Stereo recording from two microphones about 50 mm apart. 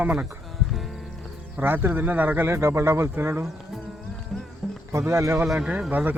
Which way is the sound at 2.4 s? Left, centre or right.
Right.